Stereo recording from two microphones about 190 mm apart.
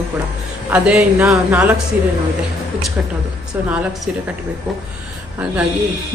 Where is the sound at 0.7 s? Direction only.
5° right (ahead or behind).